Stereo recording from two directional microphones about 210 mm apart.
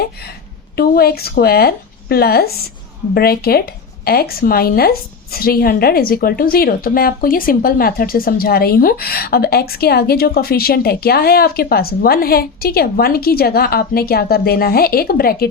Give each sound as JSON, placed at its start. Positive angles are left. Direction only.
{"t": 0.8, "sound": "a woman's voice", "side_deg": 45}